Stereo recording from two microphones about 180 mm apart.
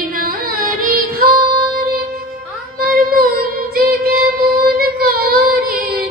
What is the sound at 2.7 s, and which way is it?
Child singing, 55° right (ahead or behind).